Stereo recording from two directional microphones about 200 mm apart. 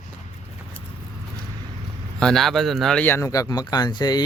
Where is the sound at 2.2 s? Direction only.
Centre (ahead or behind).